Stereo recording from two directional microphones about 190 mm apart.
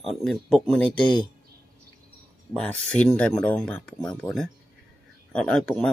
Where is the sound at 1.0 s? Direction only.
25° left (ahead or behind).